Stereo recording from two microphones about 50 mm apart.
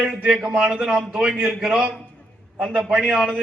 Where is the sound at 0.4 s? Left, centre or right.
Right.